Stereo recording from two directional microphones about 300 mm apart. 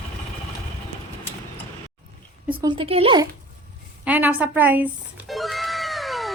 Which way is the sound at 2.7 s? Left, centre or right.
Centre.